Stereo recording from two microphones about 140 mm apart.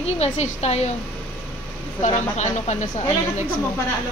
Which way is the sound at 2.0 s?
55° left (ahead or behind).